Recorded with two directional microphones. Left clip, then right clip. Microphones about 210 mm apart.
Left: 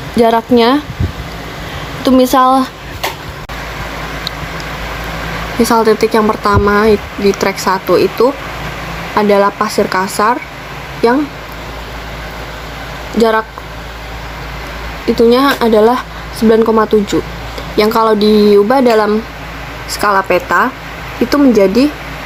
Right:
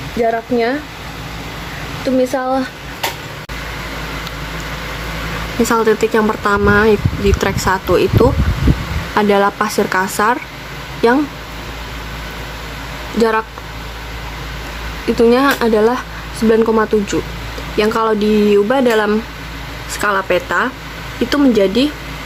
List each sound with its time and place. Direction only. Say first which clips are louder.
0.2 s speech: left 6 dB; 30° left (ahead or behind)
2.0 s speech: left 7 dB; 30° left (ahead or behind)
5.6 s speech: left 3 dB; centre (ahead or behind)
13.1 s speech: left 3 dB; centre (ahead or behind)
15.1 s speech: left 2 dB; centre (ahead or behind)
21.2 s speech: left 4 dB; 15° right (ahead or behind)
21.6 s speech: left 4 dB; 5° left (ahead or behind)